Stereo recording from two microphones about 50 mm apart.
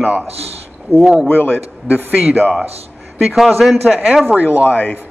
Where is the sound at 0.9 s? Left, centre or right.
Right.